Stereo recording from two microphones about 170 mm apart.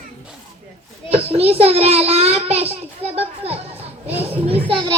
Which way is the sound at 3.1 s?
35° right (ahead or behind).